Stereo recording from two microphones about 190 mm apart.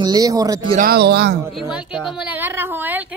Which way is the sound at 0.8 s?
55° right (ahead or behind).